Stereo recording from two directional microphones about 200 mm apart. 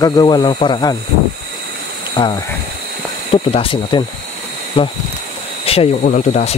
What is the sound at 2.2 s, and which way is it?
Speech, 20° left (ahead or behind).